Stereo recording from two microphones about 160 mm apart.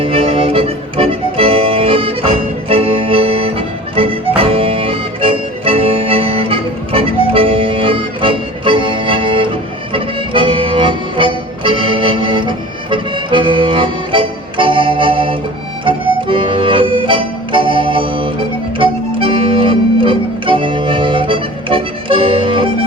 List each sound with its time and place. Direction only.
0.0 s accordion: 35° right (ahead or behind)
3.9 s music: 35° right (ahead or behind)
18.8 s accordion: 35° right (ahead or behind)